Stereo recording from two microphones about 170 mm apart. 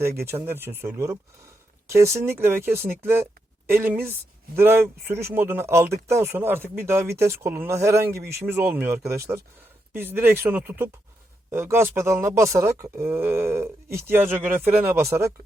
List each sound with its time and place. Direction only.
0.2 s speech: 15° right (ahead or behind)